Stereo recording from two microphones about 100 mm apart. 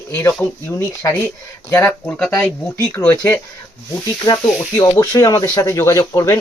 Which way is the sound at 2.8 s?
30° left (ahead or behind).